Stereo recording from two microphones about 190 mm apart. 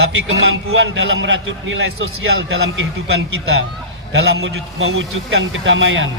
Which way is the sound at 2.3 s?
60° right (ahead or behind).